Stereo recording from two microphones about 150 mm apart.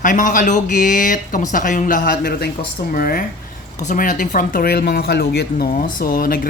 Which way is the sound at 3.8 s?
60° left (ahead or behind).